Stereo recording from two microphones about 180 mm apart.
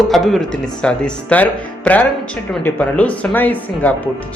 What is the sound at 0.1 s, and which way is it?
Speech, centre (ahead or behind).